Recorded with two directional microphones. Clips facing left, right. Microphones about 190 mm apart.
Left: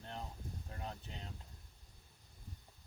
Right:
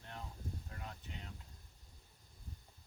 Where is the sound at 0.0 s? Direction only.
30° left (ahead or behind).